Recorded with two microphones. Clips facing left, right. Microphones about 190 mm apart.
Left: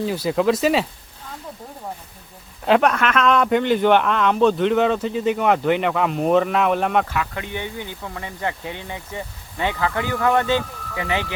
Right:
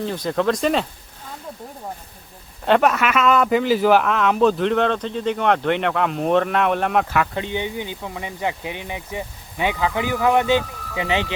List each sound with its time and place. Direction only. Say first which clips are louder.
0.0 s speech: left 2 dB; 5° left (ahead or behind)
2.6 s speech: even; centre (ahead or behind)
7.3 s speech: right 4 dB; 20° right (ahead or behind)